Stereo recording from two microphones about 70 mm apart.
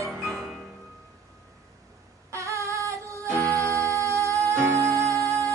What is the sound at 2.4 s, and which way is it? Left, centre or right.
Female singing, right.